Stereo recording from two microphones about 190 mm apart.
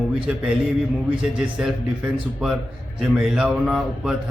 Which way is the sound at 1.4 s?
5° right (ahead or behind).